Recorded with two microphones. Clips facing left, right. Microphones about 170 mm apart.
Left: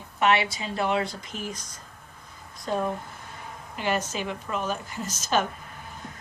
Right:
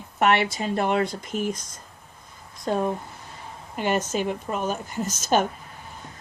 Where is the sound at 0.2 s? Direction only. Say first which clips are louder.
Right 2 dB; 50° right (ahead or behind).